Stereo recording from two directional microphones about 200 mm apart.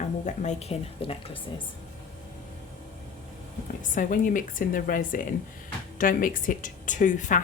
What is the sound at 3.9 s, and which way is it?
Speech, 40° left (ahead or behind).